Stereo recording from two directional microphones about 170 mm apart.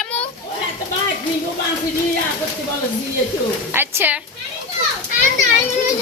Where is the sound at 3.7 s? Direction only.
10° right (ahead or behind).